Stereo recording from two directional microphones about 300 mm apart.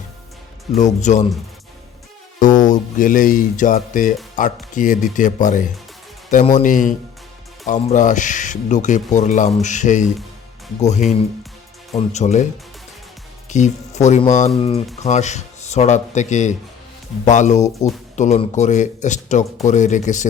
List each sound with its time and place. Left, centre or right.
0.8 s speech: left
2.4 s speech: left
13.5 s speech: left